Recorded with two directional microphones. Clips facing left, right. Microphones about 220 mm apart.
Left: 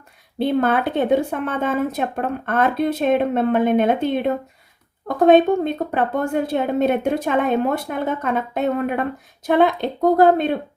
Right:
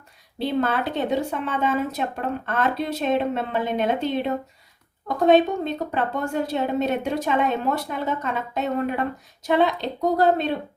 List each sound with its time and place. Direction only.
0.3 s speech: 55° left (ahead or behind)